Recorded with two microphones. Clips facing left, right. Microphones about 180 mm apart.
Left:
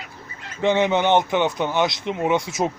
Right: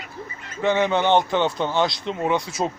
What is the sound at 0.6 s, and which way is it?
Speech, 20° left (ahead or behind).